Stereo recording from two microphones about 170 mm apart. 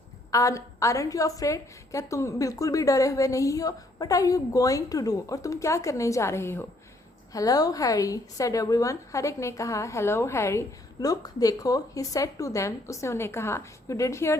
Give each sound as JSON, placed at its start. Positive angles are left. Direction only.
{"t": 0.3, "sound": "a woman's voice", "side_deg": 20}